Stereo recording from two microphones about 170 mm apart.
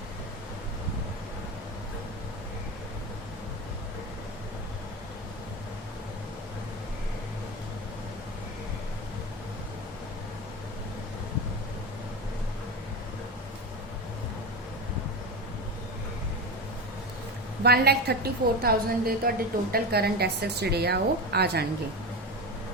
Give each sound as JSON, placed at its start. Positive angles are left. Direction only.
{"t": 17.6, "sound": "a woman's voice", "side_deg": -70}